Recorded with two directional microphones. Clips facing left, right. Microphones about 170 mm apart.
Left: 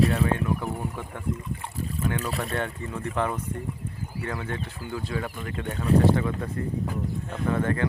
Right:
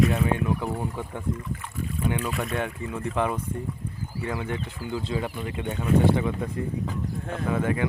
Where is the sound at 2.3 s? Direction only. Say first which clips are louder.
Right 1 dB; 35° left (ahead or behind).